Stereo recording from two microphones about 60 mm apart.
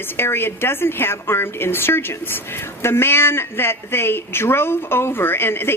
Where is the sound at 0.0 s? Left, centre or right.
Left.